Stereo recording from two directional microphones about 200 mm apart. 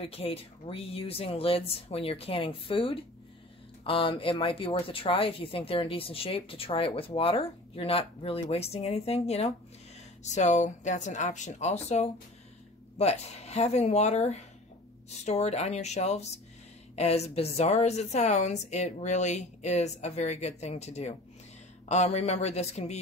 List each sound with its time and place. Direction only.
0.0 s a woman's voice: 30° left (ahead or behind)